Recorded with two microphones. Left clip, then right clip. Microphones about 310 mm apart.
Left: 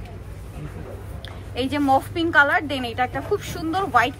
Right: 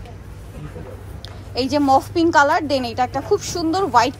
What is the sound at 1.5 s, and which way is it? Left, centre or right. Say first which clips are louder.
A woman's voice: right 4 dB; centre.